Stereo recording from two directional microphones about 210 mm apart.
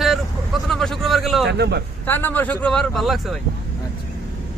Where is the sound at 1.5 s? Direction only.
55° right (ahead or behind).